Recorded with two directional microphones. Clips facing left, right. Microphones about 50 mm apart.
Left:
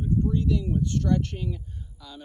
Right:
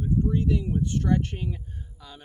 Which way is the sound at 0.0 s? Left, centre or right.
Right.